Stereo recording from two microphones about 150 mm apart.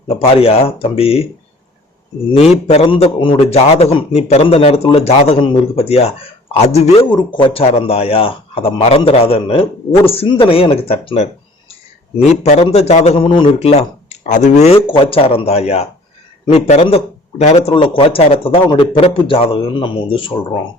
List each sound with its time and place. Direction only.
0.1 s a man's voice: 40° left (ahead or behind)
2.3 s a man's voice: 45° left (ahead or behind)
7.1 s a man's voice: 30° left (ahead or behind)
13.7 s speech: 45° left (ahead or behind)
14.8 s a man's voice: 35° left (ahead or behind)